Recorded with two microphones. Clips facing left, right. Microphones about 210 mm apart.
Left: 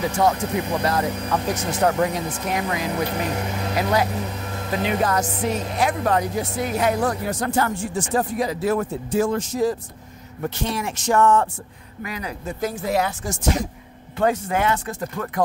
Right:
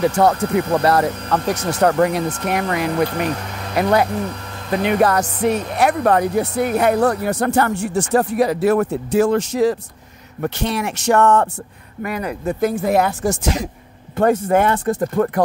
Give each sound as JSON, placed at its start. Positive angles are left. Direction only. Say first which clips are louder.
{"t": 0.0, "sound": "speech", "louder": "right 5 dB", "side_deg": -65}
{"t": 12.0, "sound": "speech", "louder": "right 7 dB", "side_deg": -55}
{"t": 14.1, "sound": "speech", "louder": "right 6 dB", "side_deg": -55}